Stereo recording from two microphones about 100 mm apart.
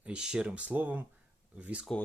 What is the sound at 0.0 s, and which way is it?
Speech, 10° right (ahead or behind).